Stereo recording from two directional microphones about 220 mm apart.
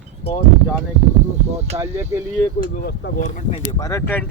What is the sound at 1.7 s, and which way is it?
Speech, 30° right (ahead or behind).